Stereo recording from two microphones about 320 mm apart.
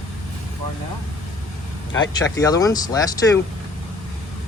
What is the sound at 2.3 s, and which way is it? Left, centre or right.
Speech, centre.